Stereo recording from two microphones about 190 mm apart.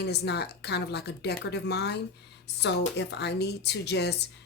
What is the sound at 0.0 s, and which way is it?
Speech, 60° left (ahead or behind).